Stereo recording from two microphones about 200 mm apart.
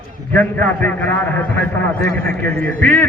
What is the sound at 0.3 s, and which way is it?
A man's voice, 10° left (ahead or behind).